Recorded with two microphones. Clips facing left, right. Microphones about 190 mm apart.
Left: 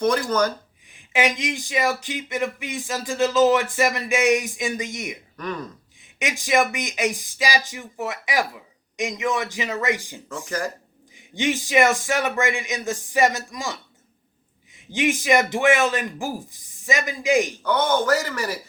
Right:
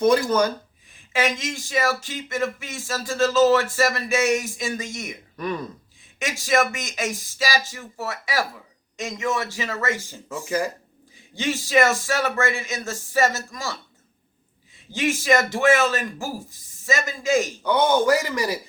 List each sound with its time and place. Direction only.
0.0 s speech: 10° right (ahead or behind)
0.9 s speech: 15° left (ahead or behind)
10.2 s speech: 15° right (ahead or behind)
11.2 s speech: 15° left (ahead or behind)
14.9 s speech: 15° left (ahead or behind)
17.6 s speech: 10° right (ahead or behind)